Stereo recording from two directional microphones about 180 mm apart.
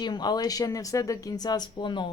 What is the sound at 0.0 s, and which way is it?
Speech, 25° left (ahead or behind).